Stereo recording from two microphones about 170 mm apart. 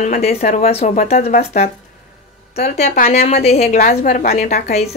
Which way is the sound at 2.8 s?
40° left (ahead or behind).